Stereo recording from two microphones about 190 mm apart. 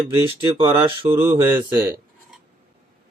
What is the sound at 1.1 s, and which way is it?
Speech, 10° right (ahead or behind).